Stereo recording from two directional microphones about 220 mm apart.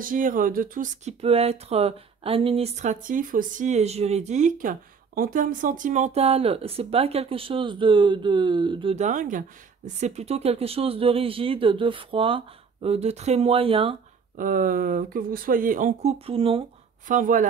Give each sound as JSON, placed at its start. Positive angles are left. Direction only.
{"t": 0.0, "sound": "speech", "side_deg": -40}
{"t": 14.3, "sound": "speech", "side_deg": -40}
{"t": 17.1, "sound": "speech", "side_deg": -35}